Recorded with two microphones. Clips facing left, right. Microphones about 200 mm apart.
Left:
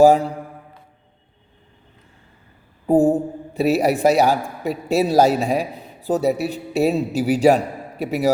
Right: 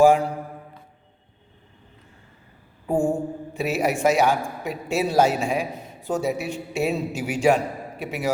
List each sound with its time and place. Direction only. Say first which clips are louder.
2.8 s a man's voice: left 7 dB; 35° left (ahead or behind)